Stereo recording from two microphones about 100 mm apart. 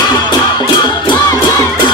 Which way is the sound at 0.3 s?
45° left (ahead or behind).